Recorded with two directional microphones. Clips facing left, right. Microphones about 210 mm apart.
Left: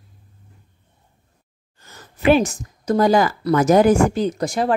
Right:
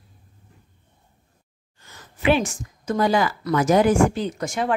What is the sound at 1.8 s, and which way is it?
A woman's voice, 40° left (ahead or behind).